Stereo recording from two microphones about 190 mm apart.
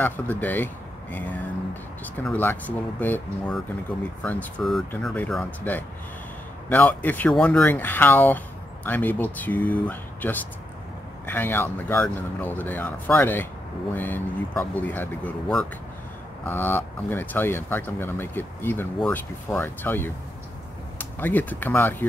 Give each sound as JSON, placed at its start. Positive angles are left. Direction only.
{"t": 0.0, "sound": "speech", "side_deg": 10}